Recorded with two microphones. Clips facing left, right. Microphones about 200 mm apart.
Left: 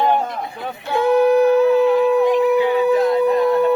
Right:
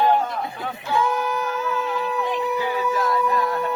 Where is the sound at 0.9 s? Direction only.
60° left (ahead or behind).